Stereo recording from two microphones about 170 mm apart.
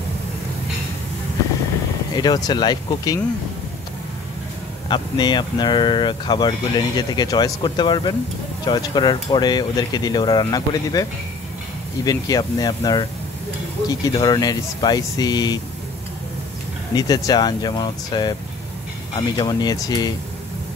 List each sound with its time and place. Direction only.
2.1 s speech: 25° left (ahead or behind)
4.8 s speech: 25° left (ahead or behind)
16.9 s speech: 25° left (ahead or behind)